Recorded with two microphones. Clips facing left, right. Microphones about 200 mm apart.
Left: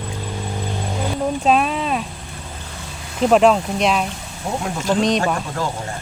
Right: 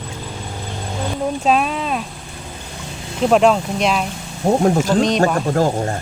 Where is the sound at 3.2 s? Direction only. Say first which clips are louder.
Even; centre (ahead or behind).